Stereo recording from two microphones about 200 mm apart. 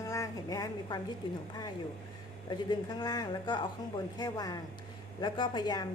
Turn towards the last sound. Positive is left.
turn(degrees=20)  # may be behind; listen again after turning